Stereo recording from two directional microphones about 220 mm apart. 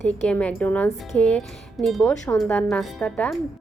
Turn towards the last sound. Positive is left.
turn(degrees=5)  # may be behind; listen again after turning